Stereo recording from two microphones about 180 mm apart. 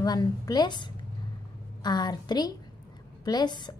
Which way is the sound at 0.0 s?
20° left (ahead or behind).